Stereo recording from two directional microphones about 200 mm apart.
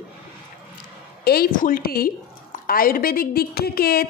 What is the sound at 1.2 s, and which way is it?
A woman's voice, 50° left (ahead or behind).